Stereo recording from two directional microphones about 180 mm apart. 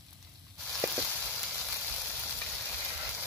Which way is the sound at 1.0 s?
5° left (ahead or behind).